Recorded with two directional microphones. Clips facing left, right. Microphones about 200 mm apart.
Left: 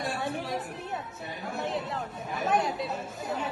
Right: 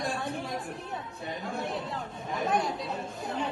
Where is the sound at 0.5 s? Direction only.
20° left (ahead or behind).